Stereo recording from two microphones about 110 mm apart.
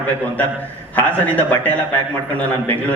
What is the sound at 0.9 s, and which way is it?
Speech, 15° left (ahead or behind).